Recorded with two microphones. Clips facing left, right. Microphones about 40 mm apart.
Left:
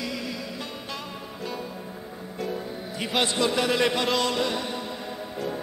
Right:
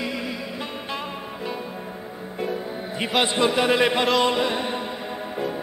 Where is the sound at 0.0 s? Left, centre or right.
Right.